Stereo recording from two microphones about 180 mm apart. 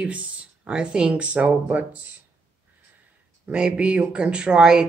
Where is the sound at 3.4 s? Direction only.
5° right (ahead or behind).